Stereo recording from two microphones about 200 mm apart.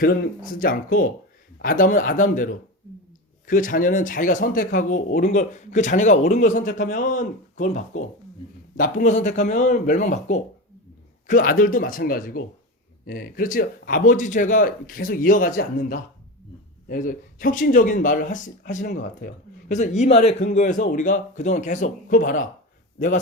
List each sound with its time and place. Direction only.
0.0 s speech: 45° left (ahead or behind)
16.9 s speech: 45° left (ahead or behind)